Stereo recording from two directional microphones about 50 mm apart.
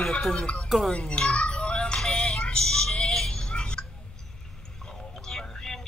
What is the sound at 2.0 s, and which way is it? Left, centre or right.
Music, centre.